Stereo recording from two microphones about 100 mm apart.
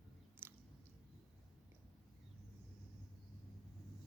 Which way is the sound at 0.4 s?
20° right (ahead or behind).